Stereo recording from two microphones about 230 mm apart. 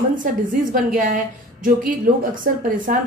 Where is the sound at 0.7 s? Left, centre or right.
Right.